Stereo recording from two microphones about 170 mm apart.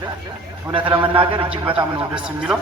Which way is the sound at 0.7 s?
30° right (ahead or behind).